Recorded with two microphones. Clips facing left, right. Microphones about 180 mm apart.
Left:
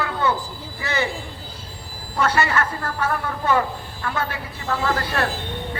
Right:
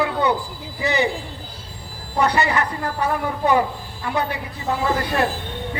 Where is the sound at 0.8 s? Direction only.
15° right (ahead or behind).